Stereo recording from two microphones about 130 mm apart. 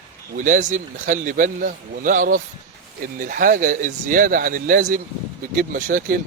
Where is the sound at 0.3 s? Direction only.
80° right.